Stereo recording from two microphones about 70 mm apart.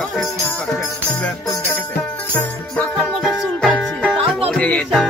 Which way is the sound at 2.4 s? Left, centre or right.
Left.